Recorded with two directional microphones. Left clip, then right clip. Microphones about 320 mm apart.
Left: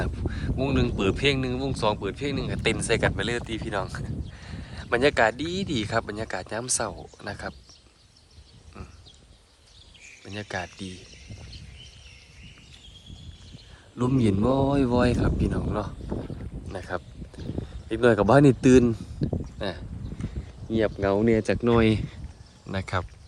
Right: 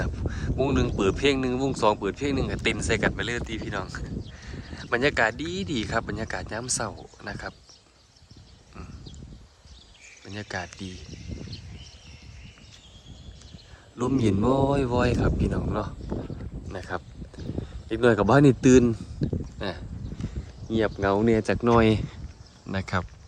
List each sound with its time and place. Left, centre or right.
0.3 s speech: centre
10.3 s speech: centre
11.1 s a sound: right
14.0 s speech: centre